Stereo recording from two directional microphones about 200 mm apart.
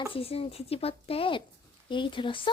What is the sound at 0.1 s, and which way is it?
Speech, 30° left (ahead or behind).